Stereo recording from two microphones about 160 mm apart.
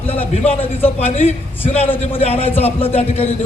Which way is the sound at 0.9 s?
40° left (ahead or behind).